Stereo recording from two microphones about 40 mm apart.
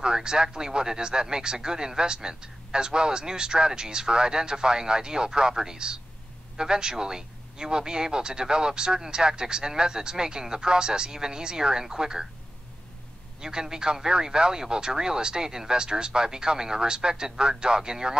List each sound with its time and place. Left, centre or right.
0.0 s speech: centre
13.4 s speech: centre